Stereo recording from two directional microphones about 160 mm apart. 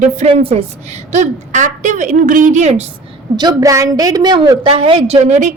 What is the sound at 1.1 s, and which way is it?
A woman's voice, 50° right (ahead or behind).